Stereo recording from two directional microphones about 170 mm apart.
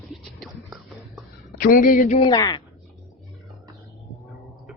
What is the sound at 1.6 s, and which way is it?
Speech, 55° left (ahead or behind).